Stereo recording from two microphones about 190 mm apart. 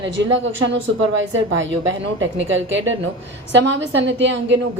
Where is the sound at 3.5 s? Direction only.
70° right (ahead or behind).